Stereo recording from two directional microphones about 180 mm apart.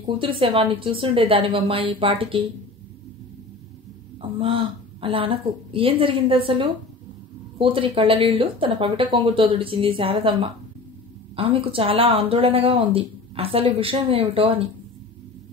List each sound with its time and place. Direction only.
0.0 s speech: 30° right (ahead or behind)
4.2 s a woman's voice: 30° right (ahead or behind)